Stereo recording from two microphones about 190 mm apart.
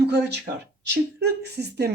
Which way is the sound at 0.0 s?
60° right (ahead or behind).